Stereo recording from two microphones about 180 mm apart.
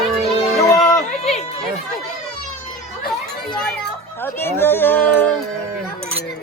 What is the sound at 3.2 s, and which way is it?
Children playing, 5° left (ahead or behind).